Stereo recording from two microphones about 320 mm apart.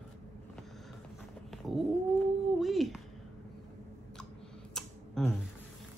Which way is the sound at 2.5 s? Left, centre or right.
Centre.